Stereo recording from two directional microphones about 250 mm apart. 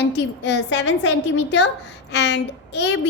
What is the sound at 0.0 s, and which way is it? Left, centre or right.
A woman's voice, left.